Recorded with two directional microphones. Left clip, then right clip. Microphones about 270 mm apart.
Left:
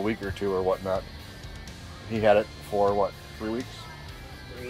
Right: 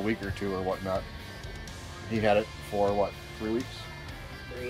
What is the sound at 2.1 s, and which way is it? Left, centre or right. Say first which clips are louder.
Speech: left 4 dB; centre.